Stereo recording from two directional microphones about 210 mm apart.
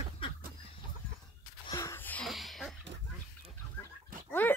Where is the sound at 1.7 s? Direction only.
15° left (ahead or behind).